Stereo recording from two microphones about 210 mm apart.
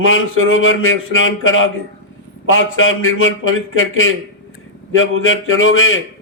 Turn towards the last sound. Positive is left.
turn(degrees=75)  # may be behind; listen again after turning